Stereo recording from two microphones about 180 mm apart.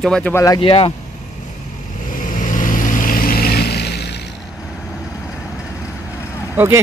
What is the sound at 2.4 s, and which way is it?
Vehicle, 45° left (ahead or behind).